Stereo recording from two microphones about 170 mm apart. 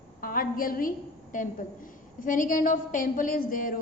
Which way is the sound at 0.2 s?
55° left (ahead or behind).